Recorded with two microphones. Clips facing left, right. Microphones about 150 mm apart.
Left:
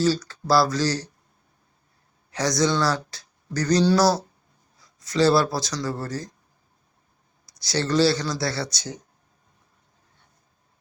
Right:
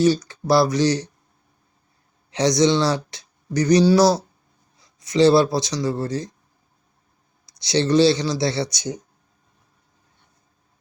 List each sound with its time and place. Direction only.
0.0 s speech: 20° right (ahead or behind)
2.3 s a man's voice: 20° right (ahead or behind)
7.6 s speech: 20° right (ahead or behind)